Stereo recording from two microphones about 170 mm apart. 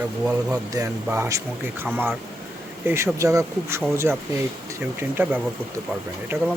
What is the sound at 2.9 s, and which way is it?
Speech, 15° right (ahead or behind).